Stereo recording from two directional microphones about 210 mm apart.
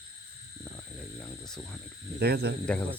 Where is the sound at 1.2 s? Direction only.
5° left (ahead or behind).